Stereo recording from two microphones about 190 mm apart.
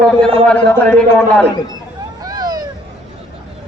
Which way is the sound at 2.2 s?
20° right (ahead or behind).